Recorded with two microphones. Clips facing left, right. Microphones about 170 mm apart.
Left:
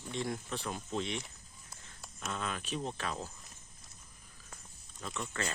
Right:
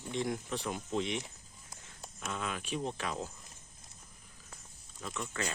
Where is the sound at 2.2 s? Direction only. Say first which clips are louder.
Even; 5° right (ahead or behind).